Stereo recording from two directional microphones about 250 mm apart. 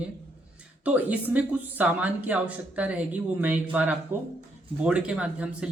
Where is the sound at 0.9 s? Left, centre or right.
Centre.